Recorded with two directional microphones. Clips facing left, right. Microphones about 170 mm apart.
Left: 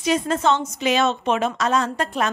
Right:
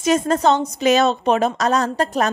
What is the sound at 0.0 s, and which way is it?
A woman's voice, 45° right (ahead or behind).